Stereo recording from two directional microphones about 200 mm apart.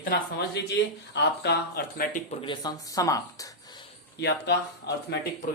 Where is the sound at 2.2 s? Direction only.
25° left (ahead or behind).